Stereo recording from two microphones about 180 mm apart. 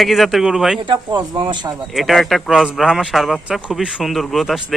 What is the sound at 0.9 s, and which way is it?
Speech, 20° right (ahead or behind).